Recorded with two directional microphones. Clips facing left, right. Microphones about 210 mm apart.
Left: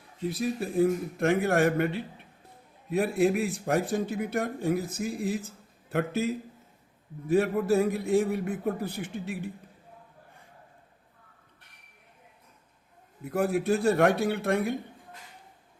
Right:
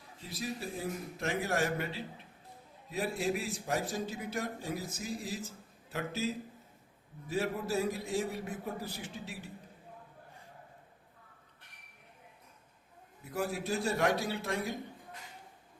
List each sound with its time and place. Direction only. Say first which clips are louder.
0.3 s a man's voice: left 9 dB; 60° left (ahead or behind)
13.2 s a man's voice: left 9 dB; 55° left (ahead or behind)